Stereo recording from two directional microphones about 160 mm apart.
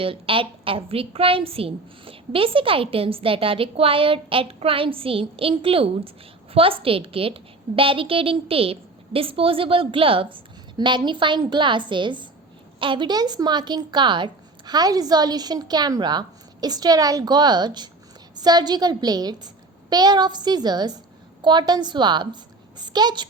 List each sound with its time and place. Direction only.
0.0 s a woman's voice: 35° right (ahead or behind)